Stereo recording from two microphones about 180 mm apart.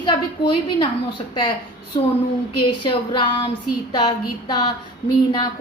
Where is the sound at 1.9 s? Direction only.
25° left (ahead or behind).